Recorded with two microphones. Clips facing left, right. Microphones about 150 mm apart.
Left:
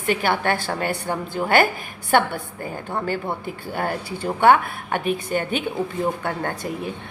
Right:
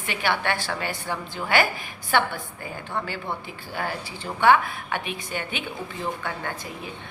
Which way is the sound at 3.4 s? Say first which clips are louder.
Left 5 dB; 50° left (ahead or behind).